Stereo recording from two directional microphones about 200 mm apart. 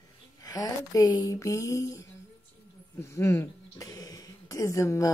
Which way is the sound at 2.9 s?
15° left (ahead or behind).